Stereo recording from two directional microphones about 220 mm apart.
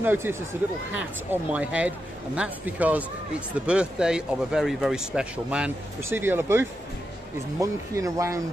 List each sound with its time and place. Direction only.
0.0 s speech: 10° right (ahead or behind)